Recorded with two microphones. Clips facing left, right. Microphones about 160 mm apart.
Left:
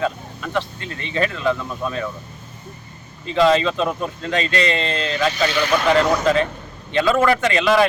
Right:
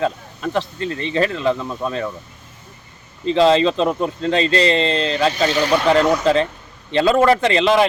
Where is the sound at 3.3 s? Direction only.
30° right (ahead or behind).